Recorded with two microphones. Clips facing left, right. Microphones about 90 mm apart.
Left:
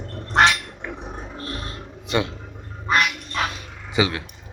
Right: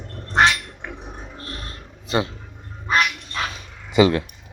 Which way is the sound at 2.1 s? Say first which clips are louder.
Right 1 dB; 35° right (ahead or behind).